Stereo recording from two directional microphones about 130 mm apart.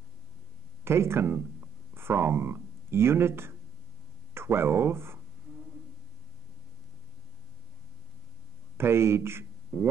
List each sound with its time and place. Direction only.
0.8 s speech: 20° right (ahead or behind)
8.7 s speech: 20° right (ahead or behind)